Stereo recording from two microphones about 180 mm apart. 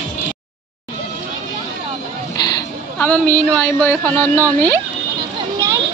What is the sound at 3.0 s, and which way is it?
Speech, 10° left (ahead or behind).